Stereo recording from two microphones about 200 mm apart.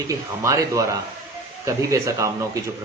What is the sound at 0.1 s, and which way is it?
Speech, 15° right (ahead or behind).